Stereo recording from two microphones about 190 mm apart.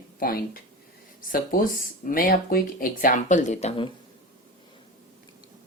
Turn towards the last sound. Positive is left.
turn(degrees=35)  # may be behind; listen again after turning